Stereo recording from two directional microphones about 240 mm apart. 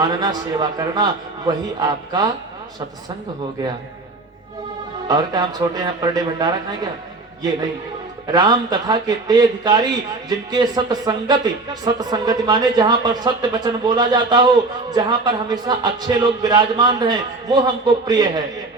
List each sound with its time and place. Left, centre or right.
0.0 s speech: centre
5.0 s speech: centre
8.3 s speech: centre